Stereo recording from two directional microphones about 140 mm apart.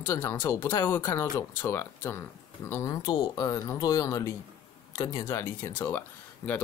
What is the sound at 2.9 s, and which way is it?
Speech, 30° left (ahead or behind).